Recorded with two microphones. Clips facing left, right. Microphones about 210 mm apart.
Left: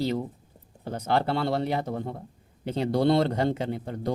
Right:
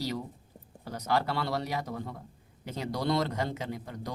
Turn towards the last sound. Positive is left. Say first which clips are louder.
# left 6 dB
turn(degrees=30)  # may be behind; listen again after turning